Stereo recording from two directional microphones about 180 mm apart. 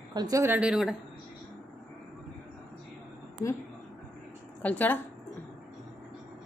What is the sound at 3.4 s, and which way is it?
Speech, 20° left (ahead or behind).